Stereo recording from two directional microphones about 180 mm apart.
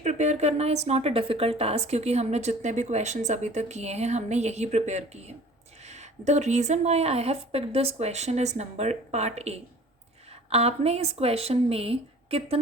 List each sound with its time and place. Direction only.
0.0 s a woman's voice: 40° right (ahead or behind)